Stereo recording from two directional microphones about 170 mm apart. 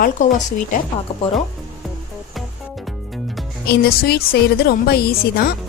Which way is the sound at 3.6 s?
70° left (ahead or behind).